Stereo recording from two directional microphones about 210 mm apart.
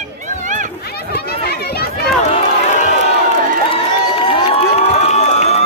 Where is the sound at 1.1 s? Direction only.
50° left (ahead or behind).